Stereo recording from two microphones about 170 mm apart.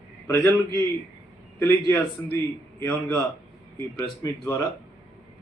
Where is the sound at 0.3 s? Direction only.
15° left (ahead or behind).